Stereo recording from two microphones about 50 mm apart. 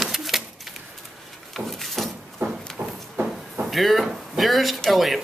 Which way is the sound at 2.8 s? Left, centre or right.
Right.